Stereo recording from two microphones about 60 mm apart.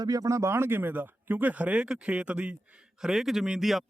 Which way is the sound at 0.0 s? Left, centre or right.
Right.